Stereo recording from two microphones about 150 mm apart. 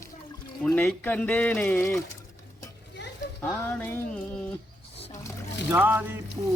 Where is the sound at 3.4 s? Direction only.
15° left (ahead or behind).